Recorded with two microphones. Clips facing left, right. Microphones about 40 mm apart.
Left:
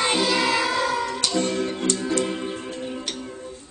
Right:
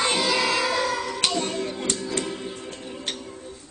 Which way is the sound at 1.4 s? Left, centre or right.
Left.